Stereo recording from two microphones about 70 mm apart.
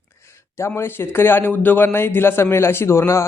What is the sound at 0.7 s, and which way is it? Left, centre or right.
Speech, left.